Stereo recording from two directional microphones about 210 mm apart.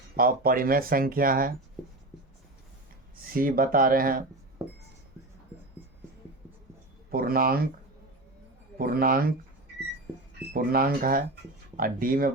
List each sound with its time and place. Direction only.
0.2 s speech: 45° right (ahead or behind)
3.3 s speech: 40° right (ahead or behind)
7.1 s speech: 45° right (ahead or behind)
8.8 s speech: 45° right (ahead or behind)
10.5 s speech: 45° right (ahead or behind)